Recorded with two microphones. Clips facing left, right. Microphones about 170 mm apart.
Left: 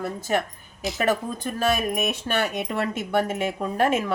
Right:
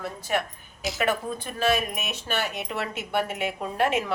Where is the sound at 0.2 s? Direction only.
45° left (ahead or behind).